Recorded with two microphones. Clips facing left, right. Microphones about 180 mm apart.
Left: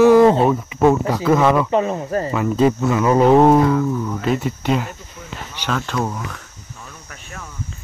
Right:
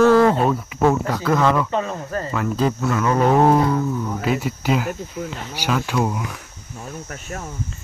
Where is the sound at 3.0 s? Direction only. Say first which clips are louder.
Left 4 dB; 20° left (ahead or behind).